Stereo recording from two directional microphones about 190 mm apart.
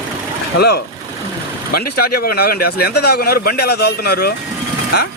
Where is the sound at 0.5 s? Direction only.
60° left (ahead or behind).